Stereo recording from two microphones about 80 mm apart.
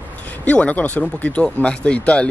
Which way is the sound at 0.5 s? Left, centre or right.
Centre.